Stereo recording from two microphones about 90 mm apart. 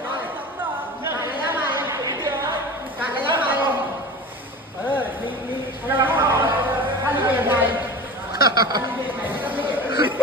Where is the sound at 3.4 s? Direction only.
20° right (ahead or behind).